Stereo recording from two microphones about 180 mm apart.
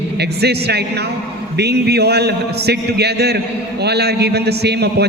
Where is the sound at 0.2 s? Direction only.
65° right (ahead or behind).